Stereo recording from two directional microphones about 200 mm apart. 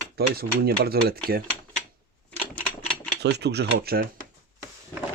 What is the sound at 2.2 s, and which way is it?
Typewriter, 10° left (ahead or behind).